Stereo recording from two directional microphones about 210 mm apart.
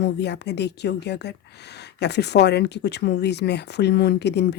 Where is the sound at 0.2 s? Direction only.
55° left (ahead or behind).